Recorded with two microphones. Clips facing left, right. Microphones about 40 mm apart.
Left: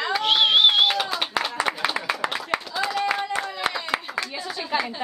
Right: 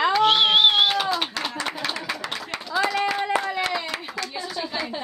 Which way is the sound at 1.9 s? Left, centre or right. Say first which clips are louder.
Left 3 dB; centre.